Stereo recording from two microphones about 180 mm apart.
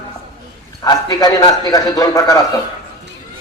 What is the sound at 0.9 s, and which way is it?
A man's voice, 20° left (ahead or behind).